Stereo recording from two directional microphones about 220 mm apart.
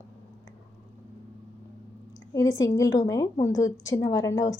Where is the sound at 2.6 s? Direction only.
15° left (ahead or behind).